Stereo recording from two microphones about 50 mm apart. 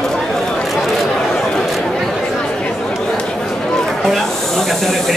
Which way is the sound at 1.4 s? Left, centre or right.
Centre.